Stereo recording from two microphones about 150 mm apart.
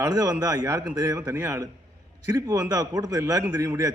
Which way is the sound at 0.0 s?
25° right (ahead or behind).